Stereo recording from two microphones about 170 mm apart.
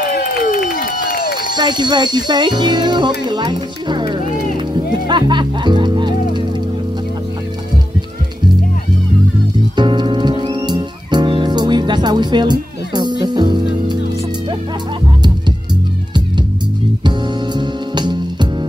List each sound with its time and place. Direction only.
0.2 s a sound: 55° left (ahead or behind)
1.6 s speech: 25° right (ahead or behind)
4.7 s music: 25° right (ahead or behind)
9.8 s music: 25° right (ahead or behind)
17.6 s music: 25° right (ahead or behind)